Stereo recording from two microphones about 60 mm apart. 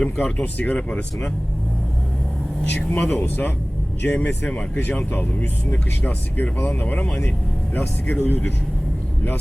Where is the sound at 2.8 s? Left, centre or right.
Left.